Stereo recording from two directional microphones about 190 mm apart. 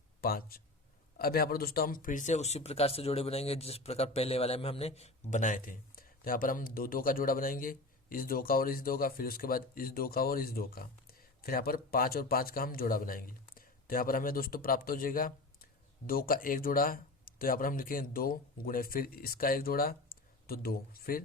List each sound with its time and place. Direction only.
0.2 s speech: 50° left (ahead or behind)